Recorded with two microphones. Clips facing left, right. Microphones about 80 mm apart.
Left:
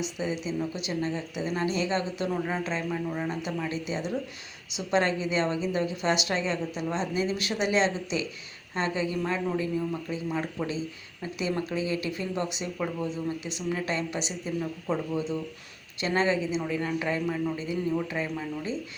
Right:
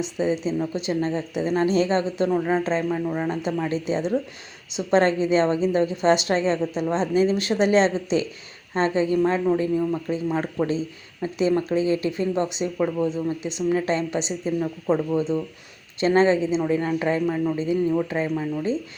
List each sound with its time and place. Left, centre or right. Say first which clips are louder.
0.0 s speech: right 7 dB; right